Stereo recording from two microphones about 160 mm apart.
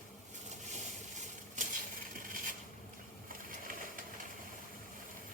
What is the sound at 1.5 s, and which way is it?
Coin, 50° right (ahead or behind).